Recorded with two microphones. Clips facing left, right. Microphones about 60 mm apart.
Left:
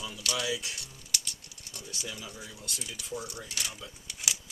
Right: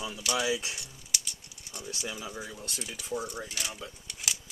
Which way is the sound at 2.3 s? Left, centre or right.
Centre.